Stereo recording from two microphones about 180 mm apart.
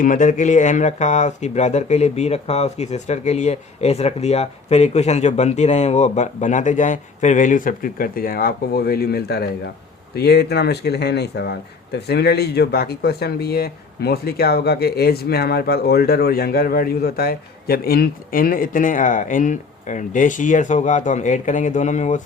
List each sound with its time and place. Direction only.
0.0 s speech: 45° left (ahead or behind)